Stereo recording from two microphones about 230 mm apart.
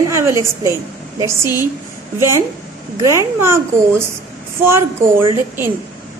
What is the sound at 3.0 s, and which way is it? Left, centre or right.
A woman's voice, centre.